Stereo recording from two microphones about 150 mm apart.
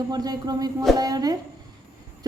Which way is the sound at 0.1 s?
25° right (ahead or behind).